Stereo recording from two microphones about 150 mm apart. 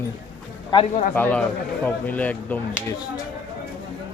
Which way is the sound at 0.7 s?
30° left (ahead or behind).